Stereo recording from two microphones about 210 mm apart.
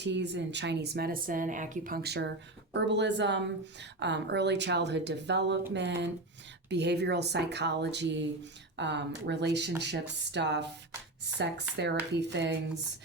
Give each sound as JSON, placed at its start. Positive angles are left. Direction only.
{"t": 0.0, "sound": "a woman's voice", "side_deg": -55}